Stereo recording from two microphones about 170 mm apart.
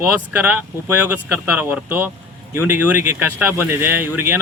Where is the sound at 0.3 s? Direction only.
10° right (ahead or behind).